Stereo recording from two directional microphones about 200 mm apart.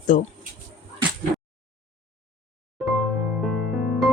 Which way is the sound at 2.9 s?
Centre (ahead or behind).